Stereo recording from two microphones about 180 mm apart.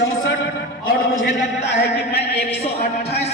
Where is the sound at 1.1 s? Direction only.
80° left.